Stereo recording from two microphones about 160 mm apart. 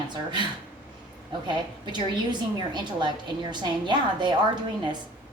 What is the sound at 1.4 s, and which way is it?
A woman's voice, 30° right (ahead or behind).